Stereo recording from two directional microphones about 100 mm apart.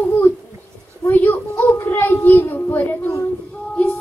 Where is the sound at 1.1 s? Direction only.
20° left (ahead or behind).